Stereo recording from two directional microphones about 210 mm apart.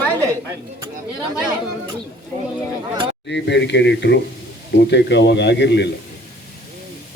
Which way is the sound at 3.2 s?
55° left (ahead or behind).